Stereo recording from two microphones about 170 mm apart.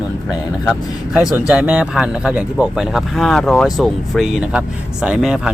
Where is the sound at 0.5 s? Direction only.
Centre (ahead or behind).